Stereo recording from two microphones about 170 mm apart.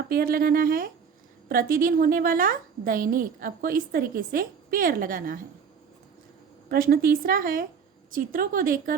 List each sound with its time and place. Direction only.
0.1 s a woman's voice: 60° right (ahead or behind)
6.7 s a woman's voice: 60° right (ahead or behind)